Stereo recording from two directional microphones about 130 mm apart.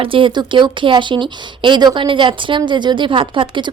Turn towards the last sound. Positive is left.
turn(degrees=-40)  # may be behind; listen again after turning